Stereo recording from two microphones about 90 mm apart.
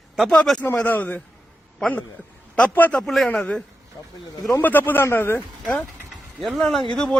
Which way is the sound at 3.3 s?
15° left (ahead or behind).